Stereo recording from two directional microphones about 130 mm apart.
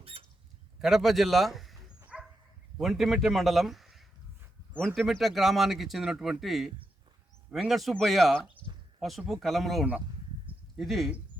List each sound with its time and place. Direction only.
0.0 s a sound: 45° right (ahead or behind)
0.8 s a man's voice: centre (ahead or behind)
2.1 s dog: 5° right (ahead or behind)
2.7 s a man's voice: centre (ahead or behind)